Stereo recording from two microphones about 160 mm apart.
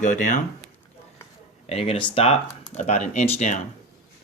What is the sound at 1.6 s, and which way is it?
Speech, 40° left (ahead or behind).